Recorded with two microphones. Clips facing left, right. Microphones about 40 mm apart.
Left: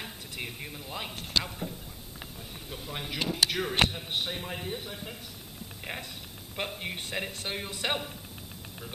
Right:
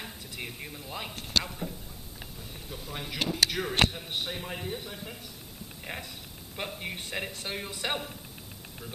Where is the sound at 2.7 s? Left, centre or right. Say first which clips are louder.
Left 1 dB; centre.